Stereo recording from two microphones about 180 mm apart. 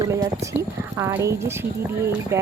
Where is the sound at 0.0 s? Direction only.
20° right (ahead or behind).